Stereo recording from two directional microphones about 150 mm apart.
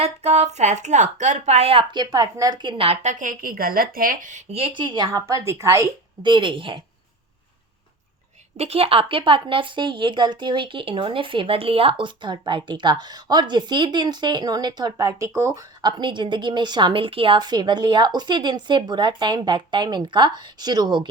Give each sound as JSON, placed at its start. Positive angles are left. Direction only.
{"t": 0.0, "sound": "a woman's voice", "side_deg": -45}
{"t": 6.2, "sound": "speech", "side_deg": -35}
{"t": 8.5, "sound": "speech", "side_deg": -45}